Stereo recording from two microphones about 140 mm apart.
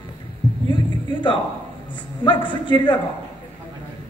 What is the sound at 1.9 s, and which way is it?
A man's voice, 35° left (ahead or behind).